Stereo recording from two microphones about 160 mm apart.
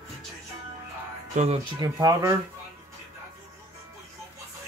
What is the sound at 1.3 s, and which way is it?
Speech, 45° right (ahead or behind).